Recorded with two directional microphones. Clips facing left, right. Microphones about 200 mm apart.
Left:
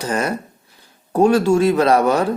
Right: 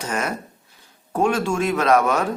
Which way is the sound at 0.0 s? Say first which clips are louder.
Left 5 dB; 35° left (ahead or behind).